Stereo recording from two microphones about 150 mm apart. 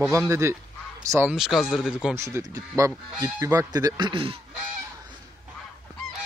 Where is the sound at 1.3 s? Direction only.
5° right (ahead or behind).